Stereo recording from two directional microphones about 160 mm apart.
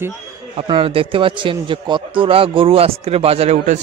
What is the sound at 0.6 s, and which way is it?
A man's voice, 35° right (ahead or behind).